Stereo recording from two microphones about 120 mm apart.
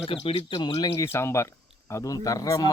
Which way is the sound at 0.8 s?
25° left (ahead or behind).